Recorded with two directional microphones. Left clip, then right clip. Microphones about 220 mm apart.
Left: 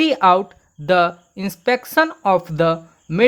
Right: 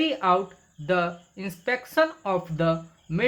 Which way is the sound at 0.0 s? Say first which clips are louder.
Left 9 dB; 45° left (ahead or behind).